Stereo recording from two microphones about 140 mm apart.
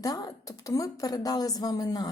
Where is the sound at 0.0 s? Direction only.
25° left (ahead or behind).